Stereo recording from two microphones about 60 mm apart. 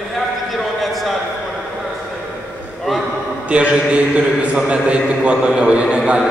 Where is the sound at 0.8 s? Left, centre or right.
Centre.